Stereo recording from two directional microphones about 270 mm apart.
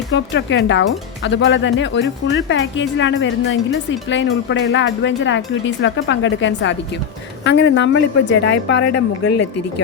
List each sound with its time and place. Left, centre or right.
0.1 s speech: left